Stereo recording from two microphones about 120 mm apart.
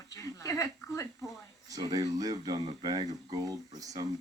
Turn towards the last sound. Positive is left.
turn(degrees=-30)  # may be behind; listen again after turning